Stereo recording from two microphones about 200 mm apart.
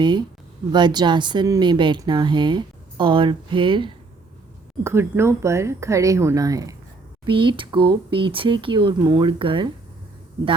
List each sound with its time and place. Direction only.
0.0 s speech: 20° right (ahead or behind)
4.8 s speech: 10° right (ahead or behind)